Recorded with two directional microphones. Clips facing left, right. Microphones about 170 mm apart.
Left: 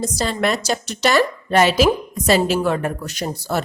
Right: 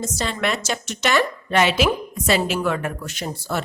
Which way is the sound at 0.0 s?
35° left (ahead or behind).